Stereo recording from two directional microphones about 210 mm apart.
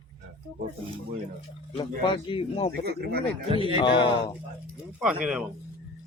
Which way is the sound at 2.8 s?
50° right (ahead or behind).